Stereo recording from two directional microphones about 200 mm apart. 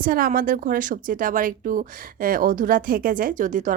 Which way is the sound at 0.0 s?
45° right (ahead or behind).